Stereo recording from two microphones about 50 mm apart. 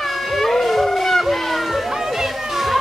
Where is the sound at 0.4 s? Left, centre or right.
Centre.